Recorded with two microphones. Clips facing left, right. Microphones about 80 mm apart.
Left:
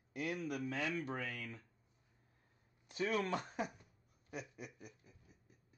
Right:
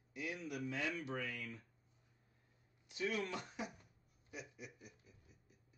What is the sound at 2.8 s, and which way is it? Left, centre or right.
Speech, left.